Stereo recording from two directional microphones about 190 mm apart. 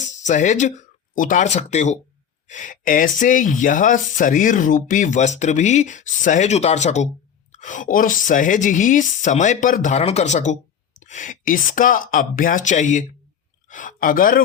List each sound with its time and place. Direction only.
0.0 s speech: 40° left (ahead or behind)